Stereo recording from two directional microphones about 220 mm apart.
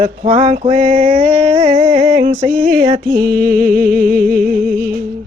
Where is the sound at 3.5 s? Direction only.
40° right (ahead or behind).